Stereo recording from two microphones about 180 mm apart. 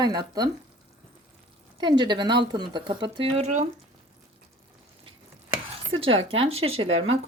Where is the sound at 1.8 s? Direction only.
25° right (ahead or behind).